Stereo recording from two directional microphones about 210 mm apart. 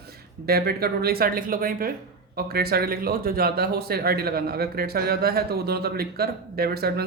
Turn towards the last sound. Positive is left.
turn(degrees=-50)  # may be behind; listen again after turning